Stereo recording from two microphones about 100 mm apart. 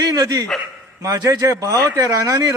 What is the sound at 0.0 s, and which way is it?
A man's voice, 35° right (ahead or behind).